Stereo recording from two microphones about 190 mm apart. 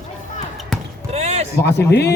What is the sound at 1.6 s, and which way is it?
Speech, 60° left (ahead or behind).